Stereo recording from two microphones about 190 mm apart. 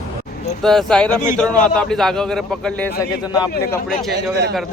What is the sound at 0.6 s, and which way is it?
A man's voice, centre (ahead or behind).